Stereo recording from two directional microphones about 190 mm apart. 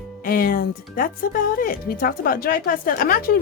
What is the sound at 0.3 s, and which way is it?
Speech, 50° left (ahead or behind).